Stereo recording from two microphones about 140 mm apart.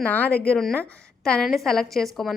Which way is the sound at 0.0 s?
10° left (ahead or behind).